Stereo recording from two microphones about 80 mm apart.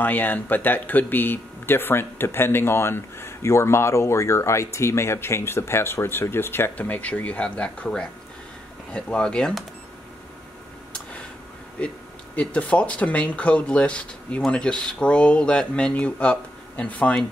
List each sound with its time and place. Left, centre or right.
0.0 s speech: left; by 9.7 s centre
11.8 s speech: centre